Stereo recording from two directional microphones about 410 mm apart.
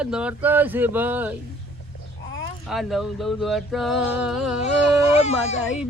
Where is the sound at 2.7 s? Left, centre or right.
Centre.